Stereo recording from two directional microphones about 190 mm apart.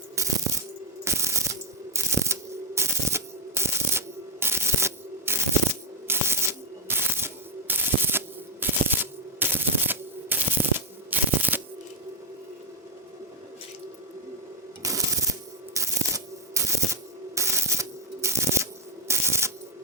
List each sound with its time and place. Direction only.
0.2 s music: 15° right (ahead or behind)
6.1 s a sound: 15° right (ahead or behind)
14.8 s music: 15° right (ahead or behind)